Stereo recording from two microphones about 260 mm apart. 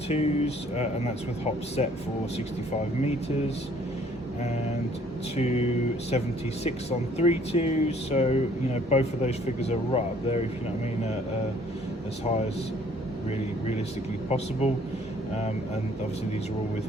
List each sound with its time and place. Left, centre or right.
0.1 s speech: left
5.4 s speech: left
12.2 s speech: left
14.3 s speech: left